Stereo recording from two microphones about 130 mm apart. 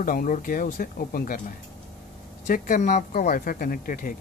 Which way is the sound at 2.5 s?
80° left.